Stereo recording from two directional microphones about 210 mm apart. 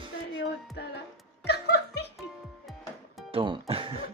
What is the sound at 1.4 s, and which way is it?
Music, 50° left (ahead or behind).